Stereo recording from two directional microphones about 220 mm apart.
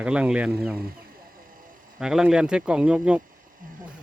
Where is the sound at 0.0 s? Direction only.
5° right (ahead or behind).